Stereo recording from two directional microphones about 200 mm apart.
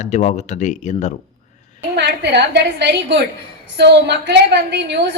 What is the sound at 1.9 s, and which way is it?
A woman's voice, 55° right (ahead or behind).